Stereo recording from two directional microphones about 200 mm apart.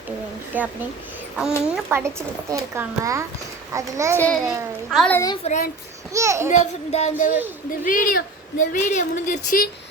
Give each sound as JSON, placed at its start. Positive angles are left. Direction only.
{"t": 0.5, "sound": "a child's voice", "side_deg": -10}
{"t": 4.9, "sound": "a child's voice", "side_deg": 5}
{"t": 5.4, "sound": "speech", "side_deg": 35}
{"t": 6.1, "sound": "a child's voice", "side_deg": -15}
{"t": 6.5, "sound": "speech", "side_deg": 35}